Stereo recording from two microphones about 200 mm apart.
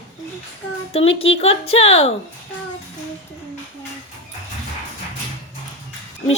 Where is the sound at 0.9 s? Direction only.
30° left (ahead or behind).